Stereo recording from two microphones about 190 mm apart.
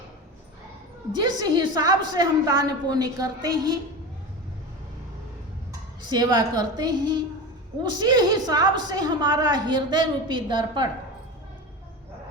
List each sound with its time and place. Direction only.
1.2 s a woman's voice: 20° right (ahead or behind)
6.1 s a woman's voice: 20° right (ahead or behind)